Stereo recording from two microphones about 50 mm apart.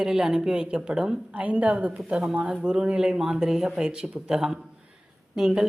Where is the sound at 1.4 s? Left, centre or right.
Right.